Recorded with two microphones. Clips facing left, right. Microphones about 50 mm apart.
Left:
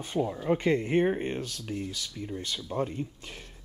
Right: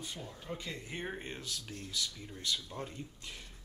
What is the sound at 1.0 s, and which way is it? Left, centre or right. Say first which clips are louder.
Speech: left 15 dB; left.